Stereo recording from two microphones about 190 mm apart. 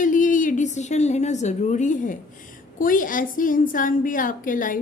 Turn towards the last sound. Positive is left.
turn(degrees=45)  # may be behind; listen again after turning